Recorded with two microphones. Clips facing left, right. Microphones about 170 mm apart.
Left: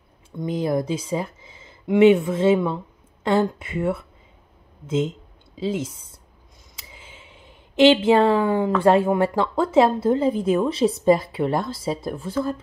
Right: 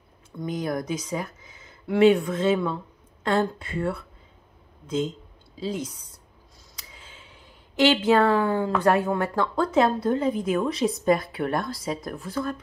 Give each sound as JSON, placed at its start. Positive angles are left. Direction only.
{"t": 0.4, "sound": "a woman's voice", "side_deg": 30}
{"t": 6.8, "sound": "a sound", "side_deg": 25}
{"t": 9.4, "sound": "a woman's voice", "side_deg": 25}